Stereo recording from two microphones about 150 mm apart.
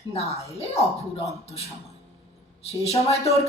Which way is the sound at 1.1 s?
45° left (ahead or behind).